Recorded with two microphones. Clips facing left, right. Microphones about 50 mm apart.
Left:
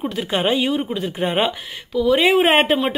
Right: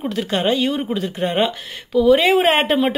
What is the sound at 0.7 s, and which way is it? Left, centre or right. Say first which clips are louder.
Speech: even; centre.